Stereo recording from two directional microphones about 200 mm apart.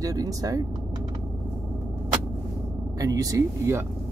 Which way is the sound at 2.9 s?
20° right (ahead or behind).